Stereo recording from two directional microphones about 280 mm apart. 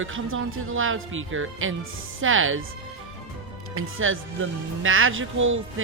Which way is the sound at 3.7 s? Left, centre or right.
Right.